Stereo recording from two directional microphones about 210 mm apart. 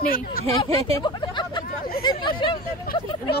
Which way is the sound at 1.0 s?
20° left (ahead or behind).